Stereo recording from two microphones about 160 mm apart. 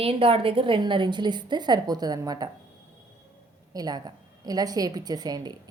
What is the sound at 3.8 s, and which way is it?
A woman's voice, 25° right (ahead or behind).